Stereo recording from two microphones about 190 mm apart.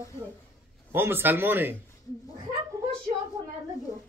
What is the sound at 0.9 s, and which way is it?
Speech, 10° right (ahead or behind).